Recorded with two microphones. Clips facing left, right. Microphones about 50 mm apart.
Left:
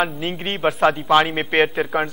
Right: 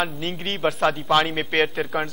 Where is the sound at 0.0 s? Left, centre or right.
Centre.